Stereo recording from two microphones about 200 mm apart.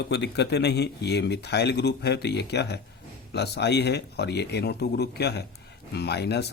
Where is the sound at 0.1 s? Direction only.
55° left (ahead or behind).